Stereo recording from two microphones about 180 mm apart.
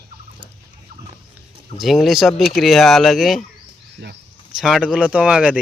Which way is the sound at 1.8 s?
Centre (ahead or behind).